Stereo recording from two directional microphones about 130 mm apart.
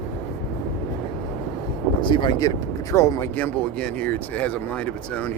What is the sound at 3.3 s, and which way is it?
Speech, 10° left (ahead or behind).